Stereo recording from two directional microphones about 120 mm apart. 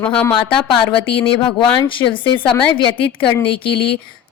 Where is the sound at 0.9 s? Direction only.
45° left (ahead or behind).